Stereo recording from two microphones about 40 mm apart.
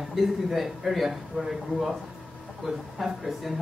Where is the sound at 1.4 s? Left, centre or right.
Centre.